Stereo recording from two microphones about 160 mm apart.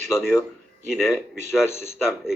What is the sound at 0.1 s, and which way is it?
A man's voice, 5° right (ahead or behind).